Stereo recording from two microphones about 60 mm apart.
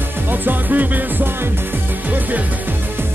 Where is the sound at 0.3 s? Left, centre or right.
Right.